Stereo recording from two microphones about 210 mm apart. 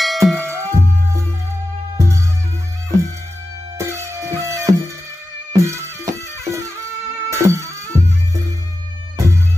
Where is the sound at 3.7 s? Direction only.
15° right (ahead or behind).